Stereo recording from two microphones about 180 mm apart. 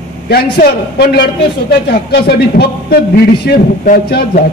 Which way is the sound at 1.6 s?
60° left (ahead or behind).